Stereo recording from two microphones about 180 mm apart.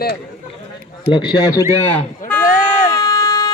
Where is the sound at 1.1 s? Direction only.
25° left (ahead or behind).